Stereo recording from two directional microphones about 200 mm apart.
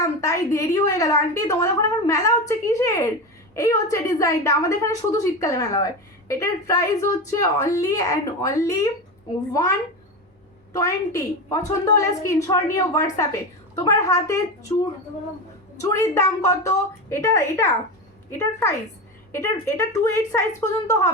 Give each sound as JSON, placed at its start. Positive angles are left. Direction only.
{"t": 0.0, "sound": "a woman's voice", "side_deg": 15}